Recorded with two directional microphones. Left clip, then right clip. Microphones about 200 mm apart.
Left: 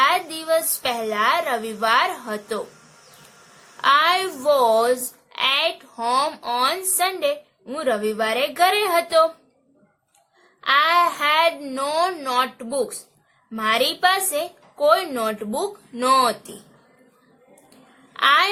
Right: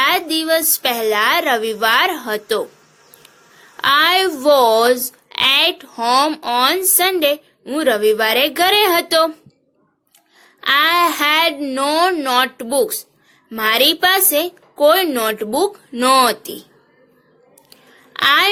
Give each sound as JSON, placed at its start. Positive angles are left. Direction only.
{"t": 0.0, "sound": "a woman's voice", "side_deg": -40}
{"t": 3.8, "sound": "speech", "side_deg": -40}
{"t": 10.6, "sound": "speech", "side_deg": -40}
{"t": 18.1, "sound": "speech", "side_deg": -40}